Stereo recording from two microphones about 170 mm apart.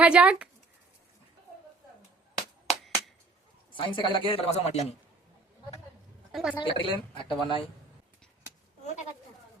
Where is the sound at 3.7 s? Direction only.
30° left (ahead or behind).